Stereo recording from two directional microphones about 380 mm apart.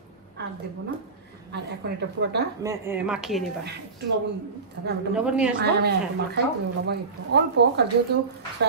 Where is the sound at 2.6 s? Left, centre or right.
Centre.